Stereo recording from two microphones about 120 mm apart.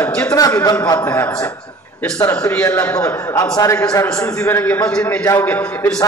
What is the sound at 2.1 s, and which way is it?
Speech, 25° left (ahead or behind).